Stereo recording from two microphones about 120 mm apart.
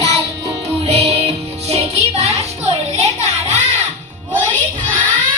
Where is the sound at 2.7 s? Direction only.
65° right (ahead or behind).